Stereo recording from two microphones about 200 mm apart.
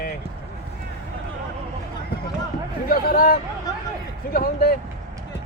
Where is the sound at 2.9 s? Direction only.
45° left (ahead or behind).